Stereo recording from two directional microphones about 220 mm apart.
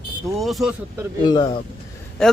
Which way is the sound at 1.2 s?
20° left (ahead or behind).